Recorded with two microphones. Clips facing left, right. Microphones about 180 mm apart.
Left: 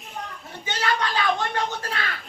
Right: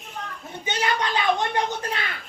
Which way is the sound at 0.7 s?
20° right (ahead or behind).